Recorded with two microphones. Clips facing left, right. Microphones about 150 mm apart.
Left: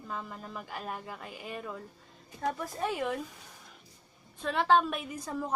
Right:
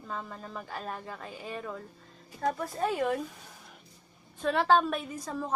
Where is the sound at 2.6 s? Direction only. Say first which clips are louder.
Right 3 dB; 35° right (ahead or behind).